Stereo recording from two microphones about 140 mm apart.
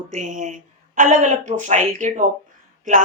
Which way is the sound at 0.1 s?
65° right (ahead or behind).